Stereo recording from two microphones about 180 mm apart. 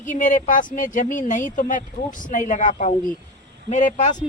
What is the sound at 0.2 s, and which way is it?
Speech, 45° left (ahead or behind).